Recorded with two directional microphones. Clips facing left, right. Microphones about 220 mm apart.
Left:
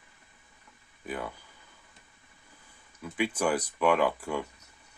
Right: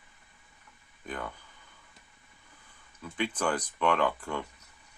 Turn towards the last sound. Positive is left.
turn(degrees=10)  # may be behind; listen again after turning